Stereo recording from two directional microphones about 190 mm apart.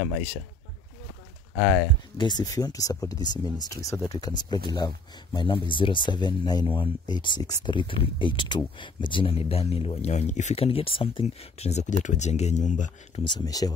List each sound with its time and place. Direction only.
2.1 s speech: 20° left (ahead or behind); by 13.2 s 40° left (ahead or behind)
13.3 s speech: 20° left (ahead or behind)